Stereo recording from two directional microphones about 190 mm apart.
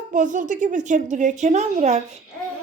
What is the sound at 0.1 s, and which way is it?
A woman's voice, 40° right (ahead or behind).